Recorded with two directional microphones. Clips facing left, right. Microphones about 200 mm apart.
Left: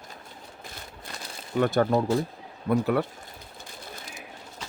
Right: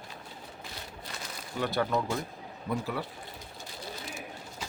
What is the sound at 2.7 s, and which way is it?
Speech, 60° left (ahead or behind).